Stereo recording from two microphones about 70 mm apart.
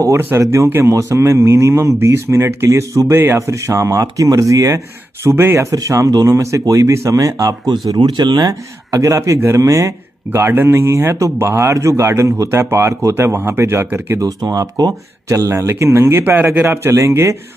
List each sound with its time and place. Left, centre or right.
0.1 s speech: right
0.9 s speech: right
3.1 s speech: right
3.3 s speech: right
5.6 s speech: right
8.5 s speech: right
10.4 s speech: right
13.8 s speech: right
14.2 s speech: right
15.5 s speech: right